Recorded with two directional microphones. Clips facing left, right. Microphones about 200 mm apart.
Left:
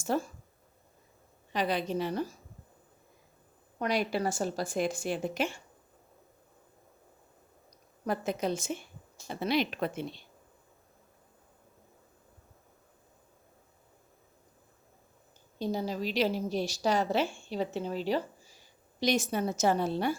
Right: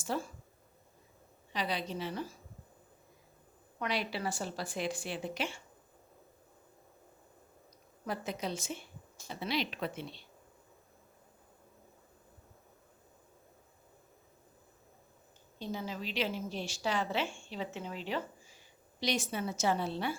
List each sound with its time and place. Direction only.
0.1 s a woman's voice: 50° left (ahead or behind)
1.5 s a woman's voice: 50° left (ahead or behind)
3.8 s a woman's voice: 45° left (ahead or behind)
8.0 s a woman's voice: 50° left (ahead or behind)
15.5 s a woman's voice: 40° left (ahead or behind)